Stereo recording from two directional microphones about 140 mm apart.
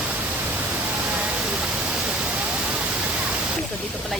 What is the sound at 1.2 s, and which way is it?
Waterfall, 5° right (ahead or behind).